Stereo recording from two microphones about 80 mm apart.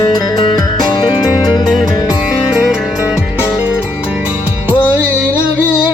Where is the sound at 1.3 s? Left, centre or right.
Left.